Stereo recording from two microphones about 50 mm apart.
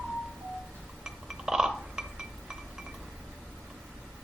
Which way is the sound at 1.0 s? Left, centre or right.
Centre.